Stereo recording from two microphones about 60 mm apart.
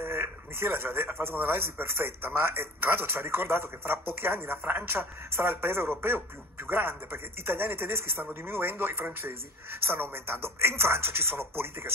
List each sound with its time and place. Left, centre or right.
0.0 s speech: right
10.1 s speech: right